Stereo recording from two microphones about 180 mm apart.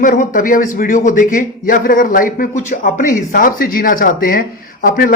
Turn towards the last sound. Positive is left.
turn(degrees=50)  # may be behind; listen again after turning